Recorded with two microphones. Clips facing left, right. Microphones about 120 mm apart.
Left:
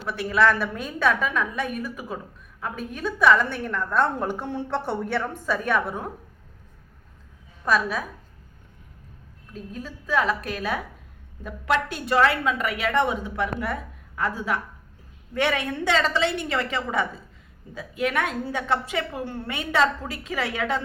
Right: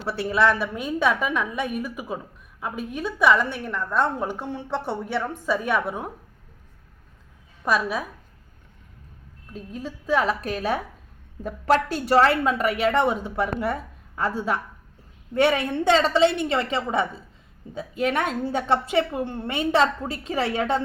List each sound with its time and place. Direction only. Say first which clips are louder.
0.0 s a woman's voice: even; 30° right (ahead or behind)
0.7 s a woman's voice: right 1 dB; 15° right (ahead or behind)
4.4 s a woman's voice: left 1 dB; centre (ahead or behind)
4.7 s a woman's voice: even; 10° right (ahead or behind)
7.6 s a woman's voice: even; 20° right (ahead or behind)
9.5 s a woman's voice: right 2 dB; 25° right (ahead or behind)